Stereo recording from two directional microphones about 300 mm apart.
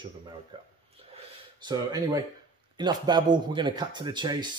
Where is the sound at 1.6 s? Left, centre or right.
Centre.